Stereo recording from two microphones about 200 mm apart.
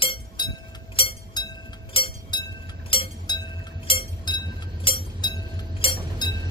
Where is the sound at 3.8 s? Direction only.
25° left (ahead or behind).